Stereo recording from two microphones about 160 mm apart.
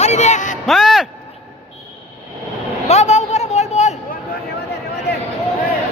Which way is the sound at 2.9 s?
45° left (ahead or behind).